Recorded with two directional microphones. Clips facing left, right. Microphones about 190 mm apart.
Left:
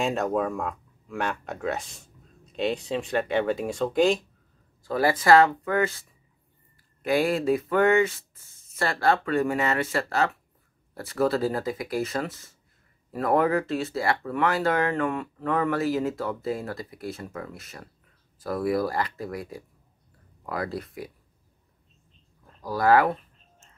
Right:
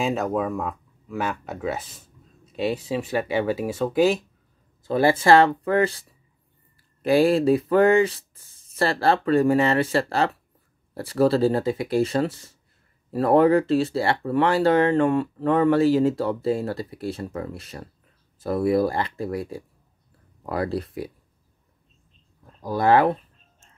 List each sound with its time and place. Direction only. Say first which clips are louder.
0.0 s speech: right 1 dB; centre (ahead or behind)
4.8 s speech: right 3 dB; 25° right (ahead or behind)
22.6 s speech: right 2 dB; 25° right (ahead or behind)